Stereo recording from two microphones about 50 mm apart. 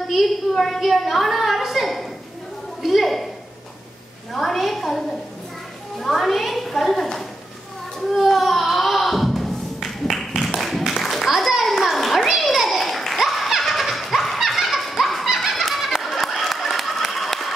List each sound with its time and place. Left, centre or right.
0.1 s a woman's voice: centre
4.3 s a woman's voice: centre
8.1 s music: centre
10.9 s children playing: centre
15.3 s a sound: centre